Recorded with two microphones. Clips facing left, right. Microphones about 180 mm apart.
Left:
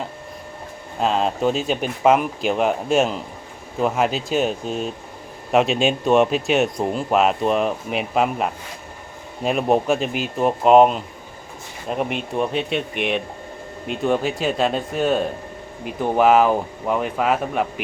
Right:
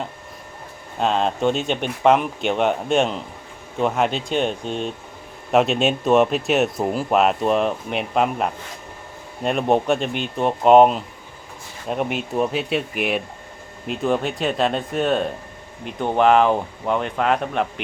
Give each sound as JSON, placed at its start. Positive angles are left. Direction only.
{"t": 0.9, "sound": "speech", "side_deg": 0}